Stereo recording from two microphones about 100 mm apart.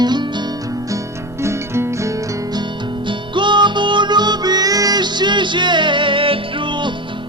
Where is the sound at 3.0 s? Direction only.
55° right (ahead or behind).